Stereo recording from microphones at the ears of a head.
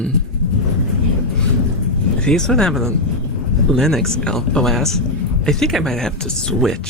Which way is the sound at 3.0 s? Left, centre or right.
Left.